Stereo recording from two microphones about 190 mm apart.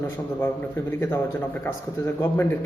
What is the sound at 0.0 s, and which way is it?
A man's voice, 10° left (ahead or behind).